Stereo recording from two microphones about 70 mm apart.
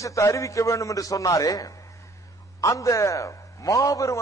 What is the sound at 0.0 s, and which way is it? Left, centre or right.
A man's voice, left.